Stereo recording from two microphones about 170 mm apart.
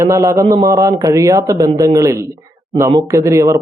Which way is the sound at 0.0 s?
15° right (ahead or behind).